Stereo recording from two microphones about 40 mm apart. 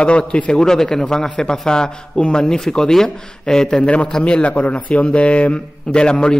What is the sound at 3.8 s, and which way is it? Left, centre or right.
A man's voice, left.